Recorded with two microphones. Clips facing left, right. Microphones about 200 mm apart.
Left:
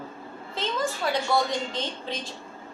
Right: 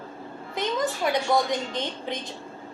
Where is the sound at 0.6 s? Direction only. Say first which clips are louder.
Right 2 dB; 15° right (ahead or behind).